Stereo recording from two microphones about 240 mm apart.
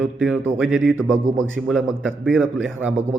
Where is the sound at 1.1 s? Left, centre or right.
Right.